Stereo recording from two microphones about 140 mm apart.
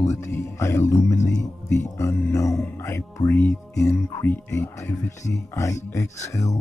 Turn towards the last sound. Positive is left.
turn(degrees=20)  # may be behind; listen again after turning